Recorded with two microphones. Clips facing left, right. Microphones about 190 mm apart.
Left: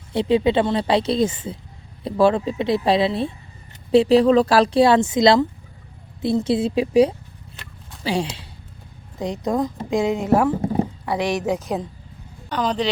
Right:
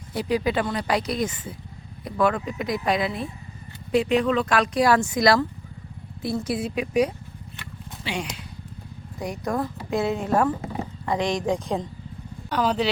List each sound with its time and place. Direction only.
0.1 s a woman's voice: 25° left (ahead or behind); by 10.5 s 10° left (ahead or behind)
10.5 s a sound: 30° left (ahead or behind)
11.0 s a woman's voice: 10° left (ahead or behind)
12.5 s speech: 5° right (ahead or behind)